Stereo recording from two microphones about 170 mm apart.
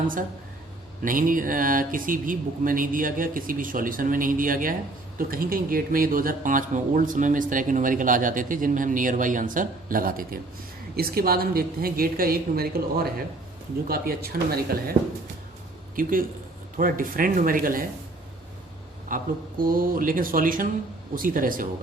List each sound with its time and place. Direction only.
1.0 s a woman's voice: 55° right (ahead or behind)
16.0 s a woman's voice: 55° right (ahead or behind)
19.0 s a woman's voice: 55° right (ahead or behind)